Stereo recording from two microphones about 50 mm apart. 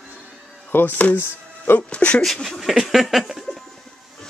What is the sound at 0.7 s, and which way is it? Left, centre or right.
Speech, left.